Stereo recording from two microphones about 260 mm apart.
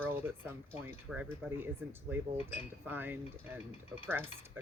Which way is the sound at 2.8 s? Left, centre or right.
Centre.